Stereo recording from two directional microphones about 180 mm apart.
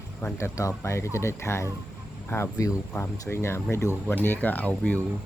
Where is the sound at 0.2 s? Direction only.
15° left (ahead or behind).